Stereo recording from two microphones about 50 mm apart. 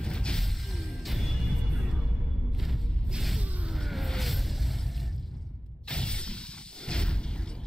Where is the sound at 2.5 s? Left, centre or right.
Centre.